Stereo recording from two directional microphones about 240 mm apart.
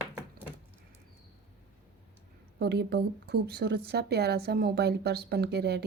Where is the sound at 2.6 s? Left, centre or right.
Right.